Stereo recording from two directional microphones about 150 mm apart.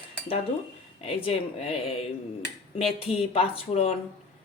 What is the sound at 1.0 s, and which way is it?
Speech, 40° left (ahead or behind).